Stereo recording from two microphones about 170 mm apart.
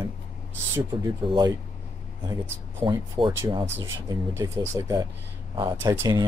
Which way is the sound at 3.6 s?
90° right.